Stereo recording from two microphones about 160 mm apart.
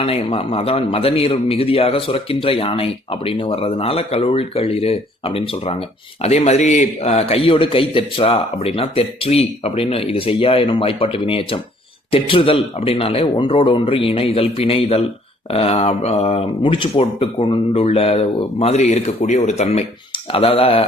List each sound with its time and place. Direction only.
0.0 s a man's voice: 35° left (ahead or behind)